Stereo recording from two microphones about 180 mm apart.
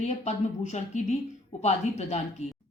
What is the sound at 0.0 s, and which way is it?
Speech, 40° left (ahead or behind).